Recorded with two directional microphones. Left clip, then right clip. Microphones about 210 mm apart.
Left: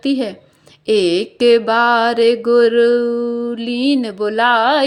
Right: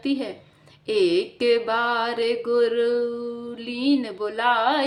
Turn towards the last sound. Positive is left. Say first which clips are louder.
# left 8 dB
turn(degrees=40)  # may be behind; listen again after turning